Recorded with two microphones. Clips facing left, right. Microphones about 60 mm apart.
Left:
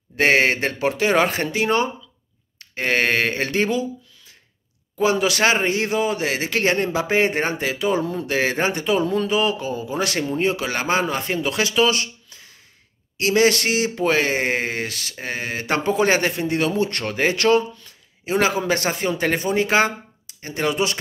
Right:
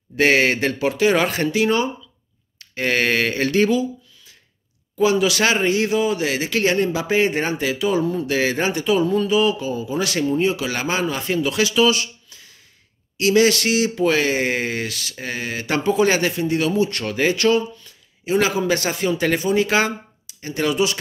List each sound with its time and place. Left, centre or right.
0.1 s speech: left
4.9 s speech: left